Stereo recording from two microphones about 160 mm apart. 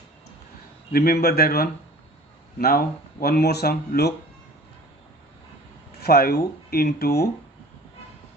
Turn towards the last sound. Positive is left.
turn(degrees=80)